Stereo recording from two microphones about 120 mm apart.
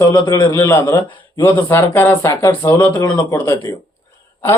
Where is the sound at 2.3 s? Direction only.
35° left (ahead or behind).